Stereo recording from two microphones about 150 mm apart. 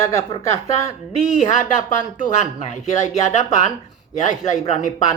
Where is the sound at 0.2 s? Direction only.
40° left (ahead or behind).